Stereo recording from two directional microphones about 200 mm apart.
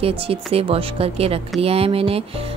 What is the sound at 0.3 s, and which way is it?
Music, 30° right (ahead or behind).